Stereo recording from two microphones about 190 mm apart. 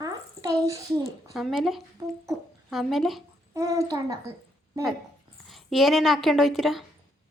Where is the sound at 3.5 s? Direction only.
15° right (ahead or behind).